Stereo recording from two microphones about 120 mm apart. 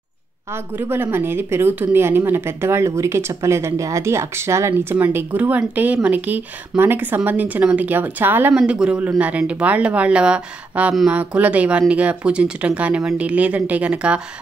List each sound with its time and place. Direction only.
0.5 s a woman's voice: 15° right (ahead or behind)